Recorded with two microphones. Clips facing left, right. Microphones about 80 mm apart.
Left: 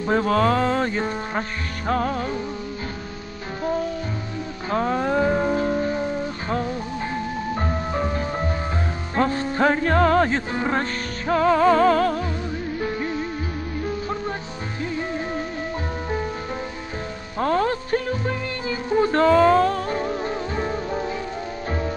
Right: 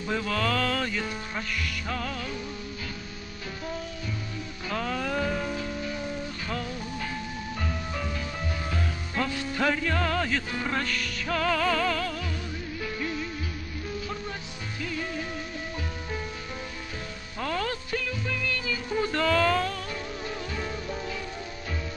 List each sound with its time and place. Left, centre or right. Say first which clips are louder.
0.0 s music: left 9 dB; left
4.6 s music: left 8 dB; left
15.0 s music: left 7 dB; left
17.4 s music: left 9 dB; left